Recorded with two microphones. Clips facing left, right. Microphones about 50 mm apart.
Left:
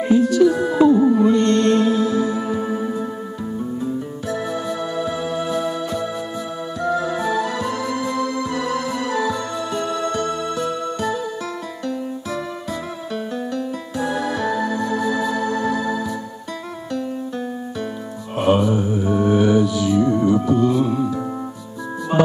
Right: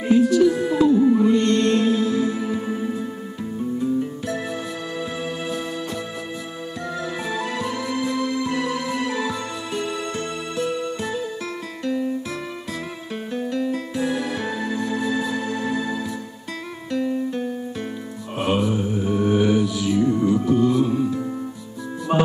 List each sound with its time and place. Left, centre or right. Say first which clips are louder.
0.1 s music: left 1 dB; left
4.3 s music: left 4 dB; left
13.1 s music: left 1 dB; left
18.4 s music: left 4 dB; left
20.4 s music: left 1 dB; left